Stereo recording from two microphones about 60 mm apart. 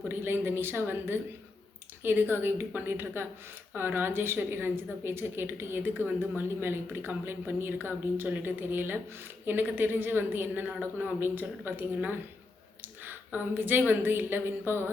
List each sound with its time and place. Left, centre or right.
0.1 s a woman's voice: right
13.1 s a woman's voice: right